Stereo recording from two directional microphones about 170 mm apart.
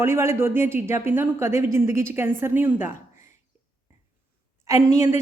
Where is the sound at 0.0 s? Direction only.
15° right (ahead or behind).